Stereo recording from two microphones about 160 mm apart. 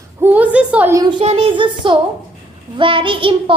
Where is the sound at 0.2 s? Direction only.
10° right (ahead or behind).